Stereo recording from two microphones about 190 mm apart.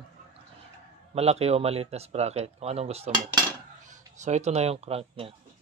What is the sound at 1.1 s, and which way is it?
Speech, 35° right (ahead or behind).